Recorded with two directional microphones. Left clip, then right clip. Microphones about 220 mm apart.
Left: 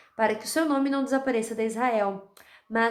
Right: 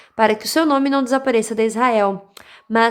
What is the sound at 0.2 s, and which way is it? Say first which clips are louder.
A woman's voice: right 9 dB; 30° right (ahead or behind).